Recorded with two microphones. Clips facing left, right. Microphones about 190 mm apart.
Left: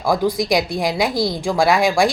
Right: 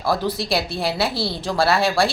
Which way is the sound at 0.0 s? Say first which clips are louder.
Left 4 dB; 15° left (ahead or behind).